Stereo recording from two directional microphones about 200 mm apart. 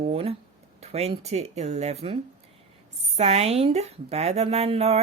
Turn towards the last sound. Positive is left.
turn(degrees=-30)  # may be behind; listen again after turning